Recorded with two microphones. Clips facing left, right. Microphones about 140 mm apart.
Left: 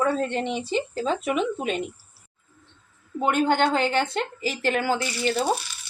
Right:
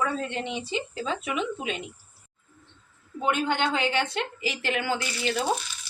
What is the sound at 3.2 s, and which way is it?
A woman's voice, 45° left (ahead or behind).